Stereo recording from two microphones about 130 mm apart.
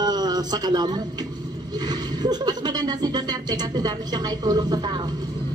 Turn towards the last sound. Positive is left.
turn(degrees=-35)  # may be behind; listen again after turning